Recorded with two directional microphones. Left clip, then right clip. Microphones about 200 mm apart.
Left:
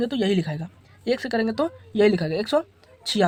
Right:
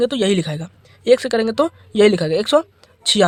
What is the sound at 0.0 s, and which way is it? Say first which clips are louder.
Speech: right 7 dB; 40° right (ahead or behind).